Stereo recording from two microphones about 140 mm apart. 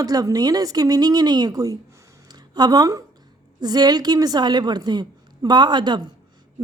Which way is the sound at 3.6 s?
30° right (ahead or behind).